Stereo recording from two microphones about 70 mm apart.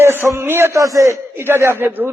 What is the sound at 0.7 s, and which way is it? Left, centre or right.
Speech, right.